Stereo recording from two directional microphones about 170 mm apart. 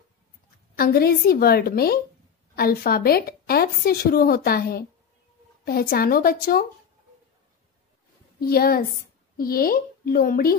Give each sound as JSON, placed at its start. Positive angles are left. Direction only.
{"t": 0.7, "sound": "a woman's voice", "side_deg": 60}
{"t": 8.4, "sound": "a woman's voice", "side_deg": 65}